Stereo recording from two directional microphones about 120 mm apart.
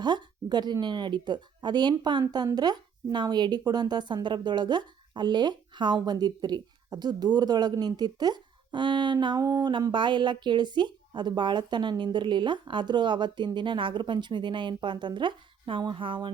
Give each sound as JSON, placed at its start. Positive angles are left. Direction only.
{"t": 0.0, "sound": "speech", "side_deg": -35}